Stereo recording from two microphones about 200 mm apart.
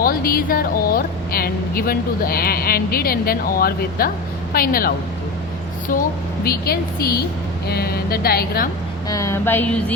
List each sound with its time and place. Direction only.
0.0 s a woman's voice: 45° left (ahead or behind)
6.4 s a woman's voice: 50° left (ahead or behind)
9.0 s a sound: 15° left (ahead or behind)